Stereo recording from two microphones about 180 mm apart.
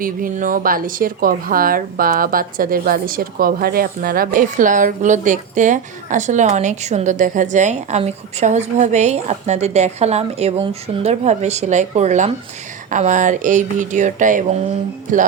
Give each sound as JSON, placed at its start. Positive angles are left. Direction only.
{"t": 0.0, "sound": "speech", "side_deg": -50}